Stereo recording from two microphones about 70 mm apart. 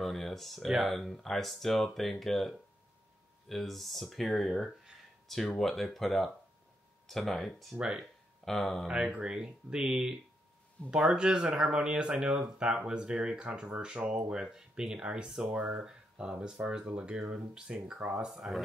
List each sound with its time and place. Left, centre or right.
0.0 s speech: centre
8.8 s speech: centre
15.4 s speech: right
15.8 s speech: centre